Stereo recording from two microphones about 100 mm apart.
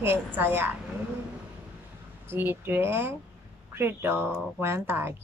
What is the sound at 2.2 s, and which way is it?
Speech, 20° right (ahead or behind).